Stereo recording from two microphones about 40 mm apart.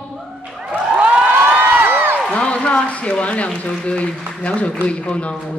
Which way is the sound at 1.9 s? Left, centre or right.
Right.